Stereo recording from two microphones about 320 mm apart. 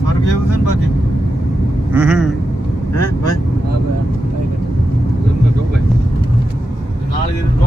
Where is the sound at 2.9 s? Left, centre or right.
Left.